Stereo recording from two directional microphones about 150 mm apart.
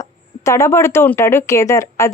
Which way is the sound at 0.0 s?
20° left (ahead or behind).